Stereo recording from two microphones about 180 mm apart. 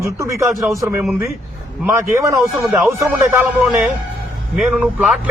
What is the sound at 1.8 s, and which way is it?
A man's voice, 15° right (ahead or behind).